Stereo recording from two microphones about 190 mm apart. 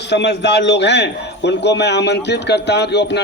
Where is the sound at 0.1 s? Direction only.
65° left (ahead or behind).